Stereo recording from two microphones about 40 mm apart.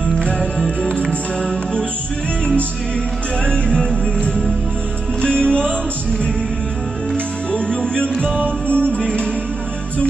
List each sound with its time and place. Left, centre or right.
3.4 s music: left
7.5 s music: left